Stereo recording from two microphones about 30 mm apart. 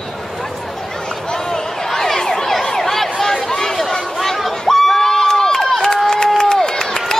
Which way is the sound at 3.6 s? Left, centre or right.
Centre.